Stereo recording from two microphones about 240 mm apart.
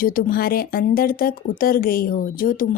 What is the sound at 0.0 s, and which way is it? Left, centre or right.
Speech, left.